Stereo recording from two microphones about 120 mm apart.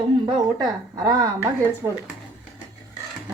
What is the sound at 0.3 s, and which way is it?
Speech, 30° right (ahead or behind).